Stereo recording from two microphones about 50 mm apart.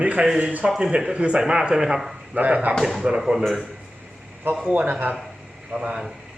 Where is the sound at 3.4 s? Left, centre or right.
Centre.